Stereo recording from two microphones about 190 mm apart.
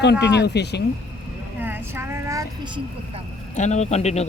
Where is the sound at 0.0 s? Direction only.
65° left (ahead or behind).